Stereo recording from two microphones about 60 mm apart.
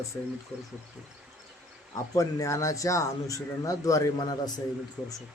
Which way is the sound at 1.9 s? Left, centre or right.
Left.